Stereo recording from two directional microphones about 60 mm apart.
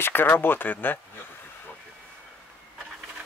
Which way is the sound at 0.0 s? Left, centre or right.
Left.